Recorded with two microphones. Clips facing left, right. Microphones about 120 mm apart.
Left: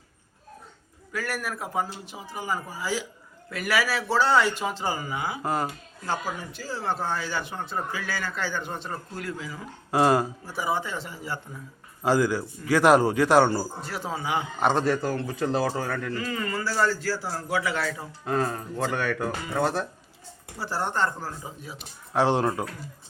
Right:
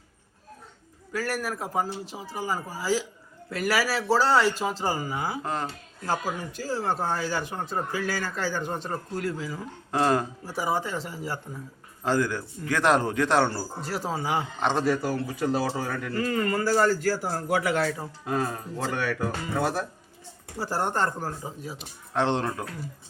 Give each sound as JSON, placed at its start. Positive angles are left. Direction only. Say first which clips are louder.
{"t": 1.1, "sound": "speech", "louder": "right 2 dB", "side_deg": -35}
{"t": 5.4, "sound": "a man's voice", "louder": "left 3 dB", "side_deg": 5}
{"t": 6.1, "sound": "speech", "louder": "right 1 dB", "side_deg": -40}
{"t": 9.9, "sound": "a man's voice", "louder": "left 3 dB", "side_deg": 10}
{"t": 10.4, "sound": "speech", "louder": "right 1 dB", "side_deg": -35}
{"t": 12.0, "sound": "a man's voice", "louder": "left 3 dB", "side_deg": 10}
{"t": 13.8, "sound": "speech", "louder": "right 2 dB", "side_deg": -40}
{"t": 14.6, "sound": "speech", "louder": "left 4 dB", "side_deg": 5}
{"t": 14.8, "sound": "a man's voice", "louder": "even", "side_deg": -10}
{"t": 16.1, "sound": "a man's voice", "louder": "right 4 dB", "side_deg": -50}
{"t": 18.3, "sound": "a man's voice", "louder": "left 2 dB", "side_deg": -5}
{"t": 20.6, "sound": "a man's voice", "louder": "right 1 dB", "side_deg": -45}
{"t": 21.8, "sound": "a man's voice", "louder": "left 3 dB", "side_deg": 10}